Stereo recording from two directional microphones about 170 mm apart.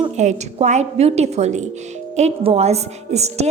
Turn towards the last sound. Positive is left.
turn(degrees=-40)  # may be behind; listen again after turning